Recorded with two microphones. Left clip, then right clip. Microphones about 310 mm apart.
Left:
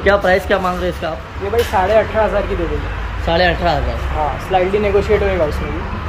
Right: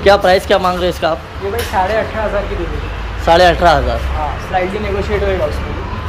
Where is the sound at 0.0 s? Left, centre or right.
Centre.